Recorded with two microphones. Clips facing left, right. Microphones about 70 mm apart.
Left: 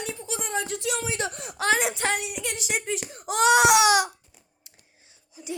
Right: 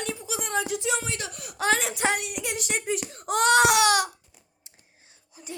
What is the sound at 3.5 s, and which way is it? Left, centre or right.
Baby cry, centre.